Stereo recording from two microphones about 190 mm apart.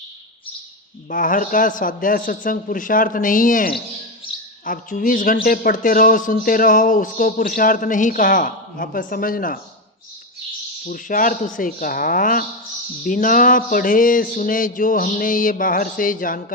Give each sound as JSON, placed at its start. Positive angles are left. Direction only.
{"t": 1.1, "sound": "speech", "side_deg": 45}
{"t": 10.8, "sound": "speech", "side_deg": 45}